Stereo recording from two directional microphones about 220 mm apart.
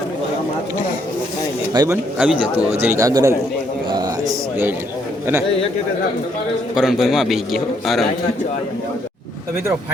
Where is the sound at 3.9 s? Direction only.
15° right (ahead or behind).